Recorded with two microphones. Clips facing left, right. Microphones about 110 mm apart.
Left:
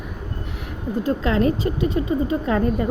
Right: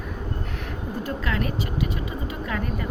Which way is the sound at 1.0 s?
25° left (ahead or behind).